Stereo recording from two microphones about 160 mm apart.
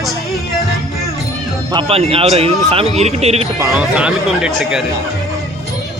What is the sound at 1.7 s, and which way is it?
A man's voice, 35° right (ahead or behind).